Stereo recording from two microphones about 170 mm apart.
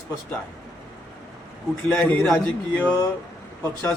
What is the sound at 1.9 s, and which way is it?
A man's voice, 5° left (ahead or behind).